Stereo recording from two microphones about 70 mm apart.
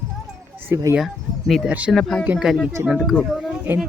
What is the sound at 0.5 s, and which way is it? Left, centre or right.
Speech, right.